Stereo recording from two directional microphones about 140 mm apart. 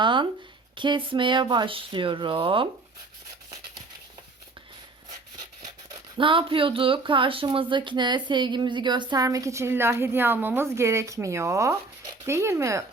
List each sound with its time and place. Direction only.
0.0 s a sound: 35° right (ahead or behind)
0.8 s speech: 35° right (ahead or behind)
6.1 s speech: 40° right (ahead or behind); by 12.8 s 20° right (ahead or behind)